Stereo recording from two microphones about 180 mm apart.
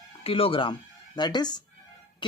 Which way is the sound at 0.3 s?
30° left (ahead or behind).